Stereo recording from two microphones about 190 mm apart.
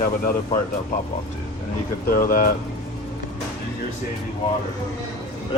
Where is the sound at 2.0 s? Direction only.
50° left (ahead or behind).